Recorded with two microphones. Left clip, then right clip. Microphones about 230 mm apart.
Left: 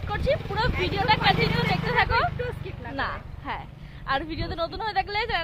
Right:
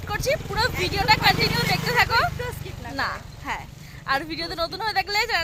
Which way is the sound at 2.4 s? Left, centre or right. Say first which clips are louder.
Even; centre.